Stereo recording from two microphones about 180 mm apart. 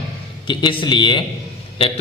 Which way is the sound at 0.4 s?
25° left (ahead or behind).